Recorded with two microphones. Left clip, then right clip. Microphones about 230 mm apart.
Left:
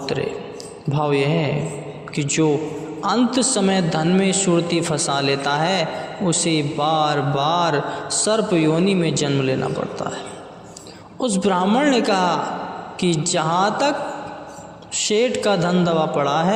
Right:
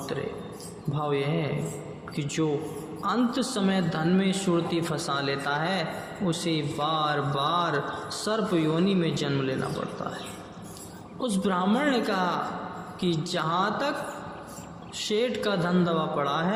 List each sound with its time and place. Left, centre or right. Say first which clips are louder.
0.0 s a man's voice: left 9 dB; left
11.2 s a man's voice: left 8 dB; left
14.9 s a man's voice: left 8 dB; left